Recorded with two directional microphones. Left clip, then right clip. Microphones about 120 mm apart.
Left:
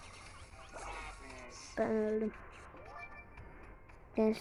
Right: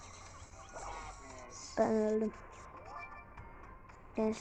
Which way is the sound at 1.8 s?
20° right (ahead or behind).